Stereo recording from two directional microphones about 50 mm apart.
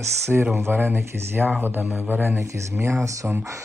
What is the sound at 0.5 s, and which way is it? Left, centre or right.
Speech, right.